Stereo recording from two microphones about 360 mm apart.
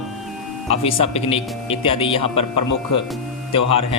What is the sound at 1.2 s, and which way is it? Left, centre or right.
Speech, centre.